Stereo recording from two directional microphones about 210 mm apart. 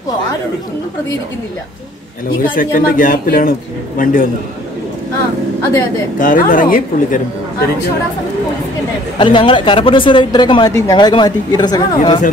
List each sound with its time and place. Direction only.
2.5 s speech: 40° left (ahead or behind)
6.1 s speech: 40° left (ahead or behind)
9.2 s a woman's voice: 25° left (ahead or behind)